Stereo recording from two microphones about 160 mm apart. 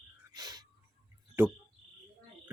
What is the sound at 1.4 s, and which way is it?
Speech, 15° right (ahead or behind).